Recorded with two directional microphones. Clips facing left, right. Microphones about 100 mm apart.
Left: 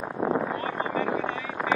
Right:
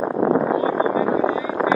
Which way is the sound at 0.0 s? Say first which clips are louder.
Right 8 dB; 60° right (ahead or behind).